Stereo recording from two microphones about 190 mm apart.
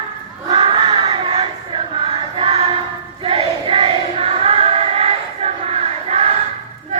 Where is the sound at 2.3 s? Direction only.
30° right (ahead or behind).